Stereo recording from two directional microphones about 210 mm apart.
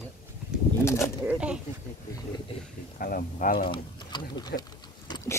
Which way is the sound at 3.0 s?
45° left (ahead or behind).